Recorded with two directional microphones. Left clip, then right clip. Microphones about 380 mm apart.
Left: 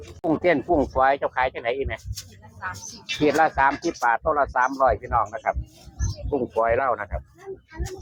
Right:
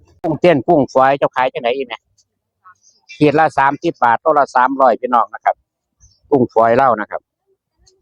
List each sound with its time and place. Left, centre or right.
0.2 s speech: right
3.2 s speech: right
6.6 s speech: right